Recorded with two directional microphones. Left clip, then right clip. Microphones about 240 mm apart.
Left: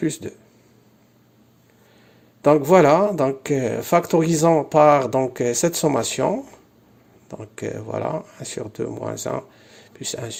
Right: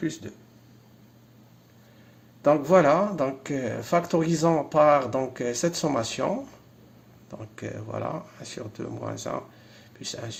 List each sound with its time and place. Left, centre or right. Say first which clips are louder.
0.0 s speech: left 7 dB; left
2.4 s speech: left 5 dB; left